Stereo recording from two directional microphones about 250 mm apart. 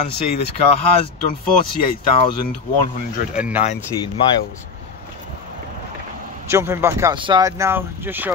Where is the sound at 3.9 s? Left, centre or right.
Centre.